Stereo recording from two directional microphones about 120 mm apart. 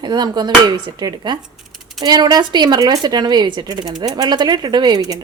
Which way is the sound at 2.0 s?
35° right (ahead or behind).